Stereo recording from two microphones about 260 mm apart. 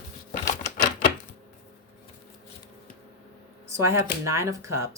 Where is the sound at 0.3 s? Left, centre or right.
Left.